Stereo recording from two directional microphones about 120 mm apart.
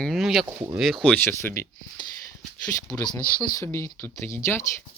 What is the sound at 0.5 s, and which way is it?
Speech, 20° right (ahead or behind).